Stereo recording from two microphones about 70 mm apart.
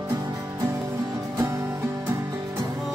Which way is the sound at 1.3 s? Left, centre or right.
Right.